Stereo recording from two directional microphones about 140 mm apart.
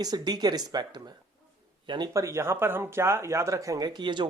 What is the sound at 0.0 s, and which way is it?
Speech, 30° right (ahead or behind).